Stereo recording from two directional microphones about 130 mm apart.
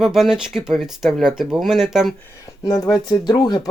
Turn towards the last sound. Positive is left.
turn(degrees=30)  # may be behind; listen again after turning